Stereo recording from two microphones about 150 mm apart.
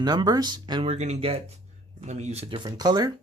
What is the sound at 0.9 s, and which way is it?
Speech, 50° right (ahead or behind).